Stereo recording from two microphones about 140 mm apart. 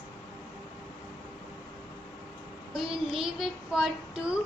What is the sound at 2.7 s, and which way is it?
Child singing, 5° right (ahead or behind).